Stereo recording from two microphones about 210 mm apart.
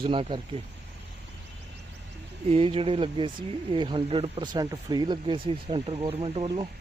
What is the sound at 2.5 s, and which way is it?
Speech, 25° right (ahead or behind).